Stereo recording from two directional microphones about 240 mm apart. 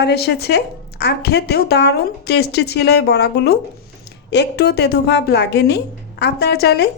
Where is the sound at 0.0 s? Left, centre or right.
Left.